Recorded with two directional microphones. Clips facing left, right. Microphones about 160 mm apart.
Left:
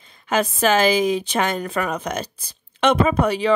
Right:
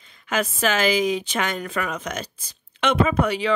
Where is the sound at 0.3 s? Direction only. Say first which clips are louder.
Left 4 dB; 35° left (ahead or behind).